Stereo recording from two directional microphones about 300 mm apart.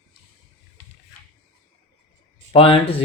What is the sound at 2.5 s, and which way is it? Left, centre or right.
Speech, centre.